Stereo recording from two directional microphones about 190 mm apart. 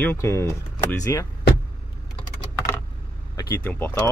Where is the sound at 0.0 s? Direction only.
10° left (ahead or behind).